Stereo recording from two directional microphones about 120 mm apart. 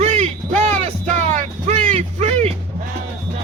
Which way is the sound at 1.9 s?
75° right (ahead or behind).